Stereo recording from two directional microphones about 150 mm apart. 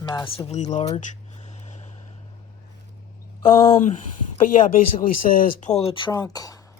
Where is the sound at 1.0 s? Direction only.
50° left (ahead or behind).